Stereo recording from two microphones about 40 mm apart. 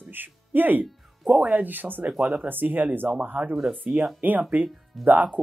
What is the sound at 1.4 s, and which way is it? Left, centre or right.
Speech, right.